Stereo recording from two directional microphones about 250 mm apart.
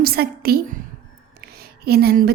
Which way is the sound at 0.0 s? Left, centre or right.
Right.